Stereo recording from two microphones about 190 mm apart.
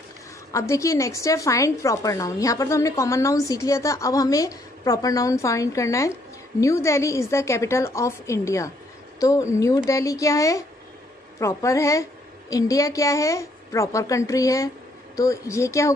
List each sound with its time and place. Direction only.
0.5 s a woman's voice: 15° left (ahead or behind)